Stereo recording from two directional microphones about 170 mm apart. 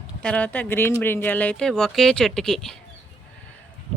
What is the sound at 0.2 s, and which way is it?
Speech, 5° left (ahead or behind).